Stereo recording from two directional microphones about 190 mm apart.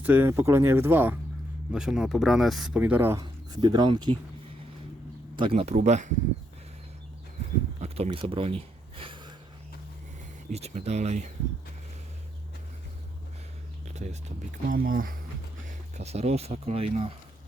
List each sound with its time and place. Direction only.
0.0 s speech: 10° right (ahead or behind); by 4.2 s 25° right (ahead or behind)
5.4 s speech: 30° right (ahead or behind)
7.8 s speech: 35° right (ahead or behind)
10.5 s speech: 35° right (ahead or behind)
13.8 s a sound: 35° right (ahead or behind)
14.7 s speech: 45° right (ahead or behind)
16.0 s speech: 35° right (ahead or behind)